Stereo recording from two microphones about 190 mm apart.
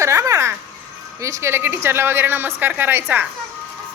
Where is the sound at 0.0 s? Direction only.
15° right (ahead or behind).